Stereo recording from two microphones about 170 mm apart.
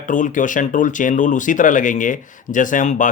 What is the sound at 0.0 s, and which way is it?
Speech, 50° left (ahead or behind).